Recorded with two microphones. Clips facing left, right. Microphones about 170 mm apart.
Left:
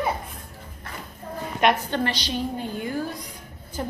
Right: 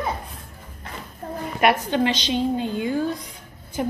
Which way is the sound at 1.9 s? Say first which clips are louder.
Right 5 dB; 20° right (ahead or behind).